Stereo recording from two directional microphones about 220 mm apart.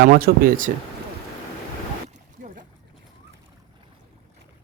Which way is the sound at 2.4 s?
35° right (ahead or behind).